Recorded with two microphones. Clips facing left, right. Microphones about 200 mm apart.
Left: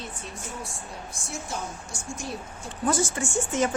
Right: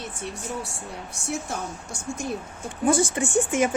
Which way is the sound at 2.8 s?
15° right (ahead or behind).